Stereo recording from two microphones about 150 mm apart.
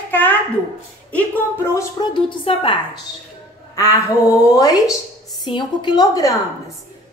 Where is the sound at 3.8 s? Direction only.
20° left (ahead or behind).